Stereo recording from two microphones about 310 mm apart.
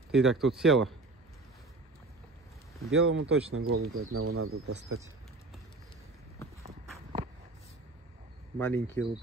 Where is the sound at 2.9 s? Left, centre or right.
Right.